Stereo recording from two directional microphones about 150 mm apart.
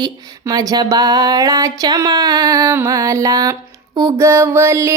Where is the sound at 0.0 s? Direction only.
25° right (ahead or behind).